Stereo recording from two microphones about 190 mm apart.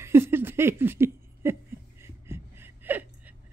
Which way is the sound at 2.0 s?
15° right (ahead or behind).